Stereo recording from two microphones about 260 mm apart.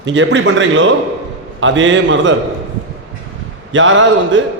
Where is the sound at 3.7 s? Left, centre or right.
Right.